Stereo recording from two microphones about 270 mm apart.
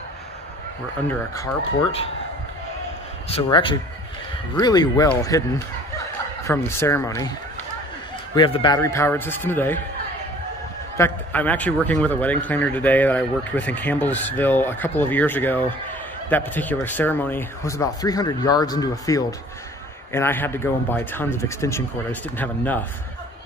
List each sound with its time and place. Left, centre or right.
1.0 s speech: centre
3.3 s speech: centre
8.4 s speech: centre
11.0 s a man's voice: centre